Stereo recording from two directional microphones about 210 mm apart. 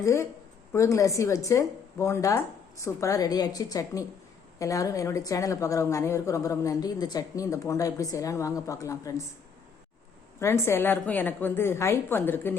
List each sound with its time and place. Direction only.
0.0 s a woman's voice: 15° left (ahead or behind)
10.4 s a woman's voice: 10° left (ahead or behind)